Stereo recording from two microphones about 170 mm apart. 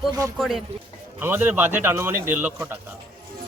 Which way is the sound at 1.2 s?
10° right (ahead or behind).